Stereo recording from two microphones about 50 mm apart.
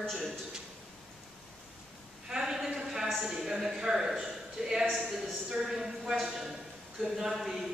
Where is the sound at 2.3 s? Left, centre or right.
Centre.